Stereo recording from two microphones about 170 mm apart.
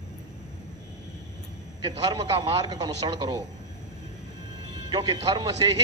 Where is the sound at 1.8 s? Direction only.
25° right (ahead or behind).